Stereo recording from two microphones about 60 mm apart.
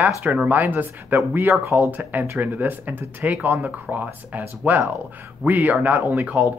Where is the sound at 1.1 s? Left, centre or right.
Right.